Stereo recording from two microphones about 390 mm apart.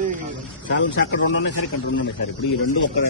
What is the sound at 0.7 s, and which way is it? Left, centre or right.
A man's voice, left.